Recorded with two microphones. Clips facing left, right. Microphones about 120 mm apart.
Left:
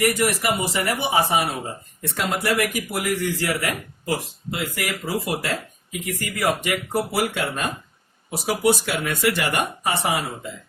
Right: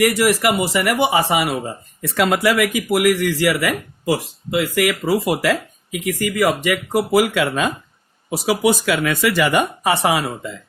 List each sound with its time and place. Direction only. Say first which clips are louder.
0.0 s speech: right 5 dB; 90° right